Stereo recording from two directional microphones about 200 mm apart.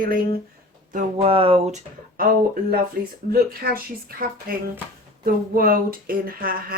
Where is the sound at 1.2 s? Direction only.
30° right (ahead or behind).